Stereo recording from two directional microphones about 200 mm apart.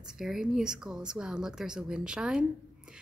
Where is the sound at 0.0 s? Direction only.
5° right (ahead or behind).